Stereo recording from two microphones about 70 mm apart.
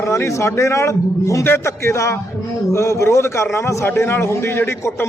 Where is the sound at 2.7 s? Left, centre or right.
Left.